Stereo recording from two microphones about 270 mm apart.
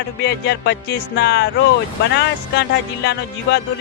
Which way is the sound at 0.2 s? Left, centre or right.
Left.